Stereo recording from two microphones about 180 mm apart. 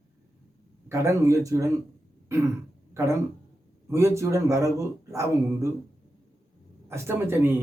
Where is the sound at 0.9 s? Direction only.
15° right (ahead or behind).